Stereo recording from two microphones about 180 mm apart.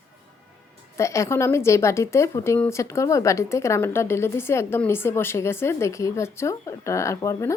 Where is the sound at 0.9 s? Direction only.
15° left (ahead or behind).